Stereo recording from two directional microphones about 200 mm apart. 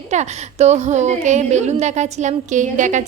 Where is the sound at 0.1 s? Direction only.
35° right (ahead or behind).